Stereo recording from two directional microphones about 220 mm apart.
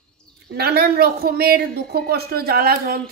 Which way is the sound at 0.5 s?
45° right (ahead or behind).